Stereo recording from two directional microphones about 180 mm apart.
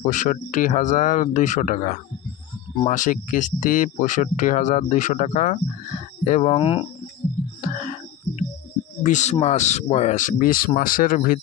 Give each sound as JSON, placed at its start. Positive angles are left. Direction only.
{"t": 0.0, "sound": "speech", "side_deg": 45}
{"t": 7.6, "sound": "music", "side_deg": 45}
{"t": 9.0, "sound": "speech", "side_deg": 40}